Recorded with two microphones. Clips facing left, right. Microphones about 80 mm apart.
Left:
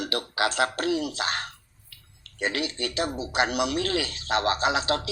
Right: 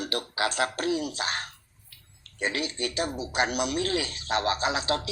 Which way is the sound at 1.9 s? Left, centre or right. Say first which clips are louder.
Left 3 dB; left.